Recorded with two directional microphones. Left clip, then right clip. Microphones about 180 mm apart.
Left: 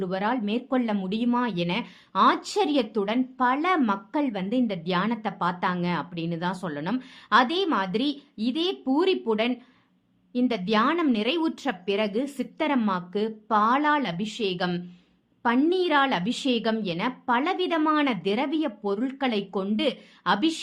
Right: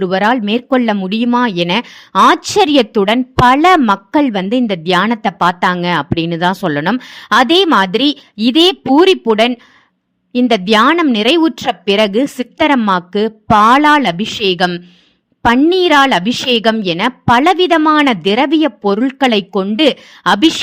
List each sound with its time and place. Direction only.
0.0 s a woman's voice: 45° right (ahead or behind)
10.5 s a woman's voice: 45° right (ahead or behind)
15.7 s a woman's voice: 45° right (ahead or behind)